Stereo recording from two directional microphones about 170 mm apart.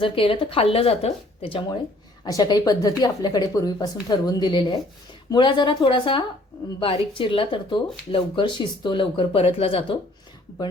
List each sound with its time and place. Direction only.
0.0 s speech: 30° left (ahead or behind)